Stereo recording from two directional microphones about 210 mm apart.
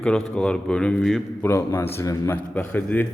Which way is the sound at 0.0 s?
5° left (ahead or behind).